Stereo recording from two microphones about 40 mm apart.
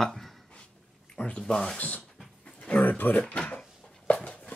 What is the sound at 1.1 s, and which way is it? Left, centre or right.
Speech, left.